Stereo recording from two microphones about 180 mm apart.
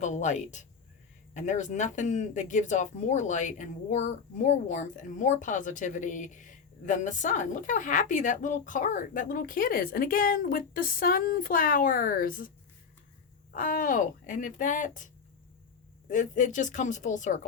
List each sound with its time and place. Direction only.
0.0 s speech: 40° left (ahead or behind)
13.5 s speech: 50° left (ahead or behind)